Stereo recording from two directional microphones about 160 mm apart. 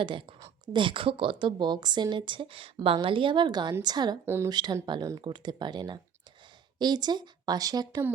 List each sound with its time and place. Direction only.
0.0 s a woman's voice: 30° right (ahead or behind)
4.3 s speech: 15° right (ahead or behind)
4.5 s speech: 25° right (ahead or behind)